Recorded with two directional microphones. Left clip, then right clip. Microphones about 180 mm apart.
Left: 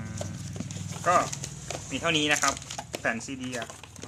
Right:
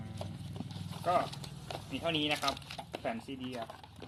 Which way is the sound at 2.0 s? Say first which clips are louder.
Left 7 dB; 45° left (ahead or behind).